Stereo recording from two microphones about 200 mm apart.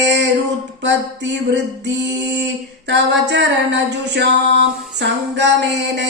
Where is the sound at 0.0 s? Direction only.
60° right (ahead or behind).